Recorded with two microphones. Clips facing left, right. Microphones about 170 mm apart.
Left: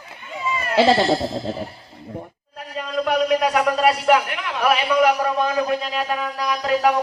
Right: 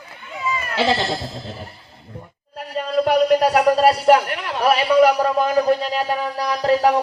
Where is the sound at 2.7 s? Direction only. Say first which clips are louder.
Right 4 dB; 40° right (ahead or behind).